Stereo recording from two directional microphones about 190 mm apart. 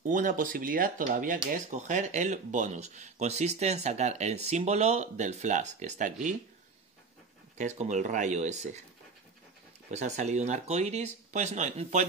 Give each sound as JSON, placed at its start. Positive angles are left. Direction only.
{"t": 0.1, "sound": "speech", "side_deg": -40}
{"t": 7.5, "sound": "speech", "side_deg": -40}
{"t": 9.8, "sound": "speech", "side_deg": -35}